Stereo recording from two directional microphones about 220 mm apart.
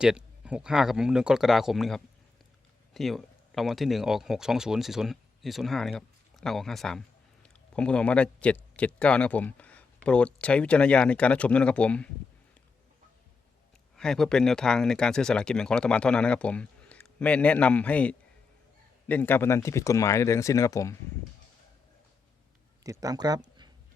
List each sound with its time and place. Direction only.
0.0 s speech: 5° right (ahead or behind)
13.9 s speech: centre (ahead or behind)
22.8 s speech: 15° right (ahead or behind)